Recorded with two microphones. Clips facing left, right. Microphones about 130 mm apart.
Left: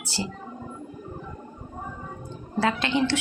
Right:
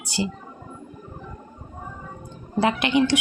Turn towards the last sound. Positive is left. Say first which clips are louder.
# right 4 dB
turn(degrees=-15)  # may be behind; listen again after turning